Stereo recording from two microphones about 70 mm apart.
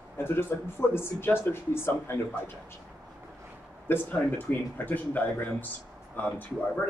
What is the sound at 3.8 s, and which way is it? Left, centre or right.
Speech, left.